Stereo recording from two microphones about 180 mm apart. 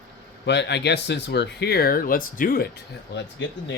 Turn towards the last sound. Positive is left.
turn(degrees=75)  # may be behind; listen again after turning